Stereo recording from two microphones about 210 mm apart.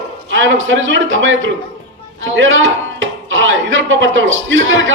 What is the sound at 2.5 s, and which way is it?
Speech, 65° right (ahead or behind).